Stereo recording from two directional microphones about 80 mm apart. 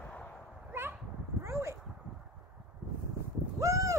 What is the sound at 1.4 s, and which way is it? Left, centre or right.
Dog, right.